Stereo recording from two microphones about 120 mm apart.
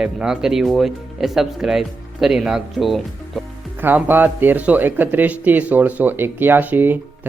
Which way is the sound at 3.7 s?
15° right (ahead or behind).